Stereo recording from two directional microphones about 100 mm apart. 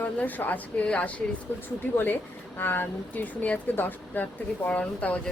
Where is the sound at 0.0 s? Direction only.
15° left (ahead or behind).